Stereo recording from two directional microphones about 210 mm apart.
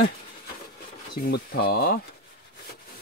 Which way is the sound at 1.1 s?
50° left (ahead or behind).